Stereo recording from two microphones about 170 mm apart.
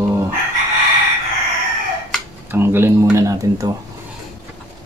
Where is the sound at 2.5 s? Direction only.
15° right (ahead or behind).